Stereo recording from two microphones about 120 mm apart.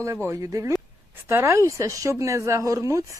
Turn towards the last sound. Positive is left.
turn(degrees=-25)  # may be behind; listen again after turning